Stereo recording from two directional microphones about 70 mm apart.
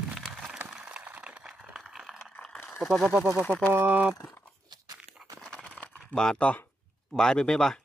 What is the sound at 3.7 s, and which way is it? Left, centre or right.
Speech, right.